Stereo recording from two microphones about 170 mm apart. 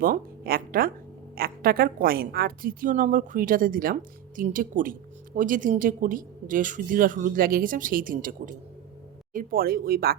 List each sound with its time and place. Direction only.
0.0 s a woman's voice: 60° right (ahead or behind)